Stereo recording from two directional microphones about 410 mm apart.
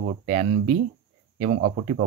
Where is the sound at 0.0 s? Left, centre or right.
Centre.